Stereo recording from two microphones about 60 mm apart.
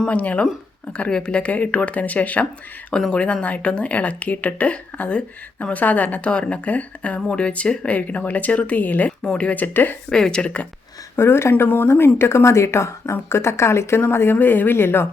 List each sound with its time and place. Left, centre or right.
0.0 s speech: left
2.9 s speech: centre
9.2 s speech: centre
9.5 s speech: left
10.1 s speech: centre
11.2 s speech: left